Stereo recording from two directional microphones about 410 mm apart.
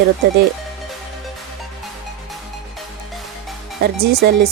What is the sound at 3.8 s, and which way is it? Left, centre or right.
Speech, right.